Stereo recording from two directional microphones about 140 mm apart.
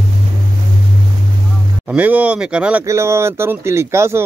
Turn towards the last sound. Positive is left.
turn(degrees=-20)  # may be behind; listen again after turning